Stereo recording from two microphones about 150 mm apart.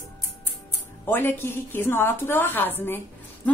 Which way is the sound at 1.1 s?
15° left (ahead or behind).